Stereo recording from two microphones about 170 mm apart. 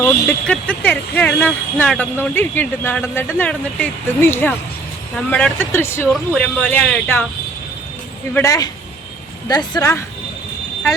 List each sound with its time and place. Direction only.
0.0 s speech: 5° left (ahead or behind)
8.4 s speech: 20° left (ahead or behind)